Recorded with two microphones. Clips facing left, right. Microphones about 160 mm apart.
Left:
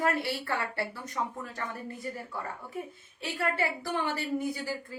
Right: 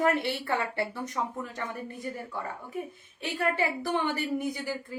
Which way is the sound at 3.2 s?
20° right (ahead or behind).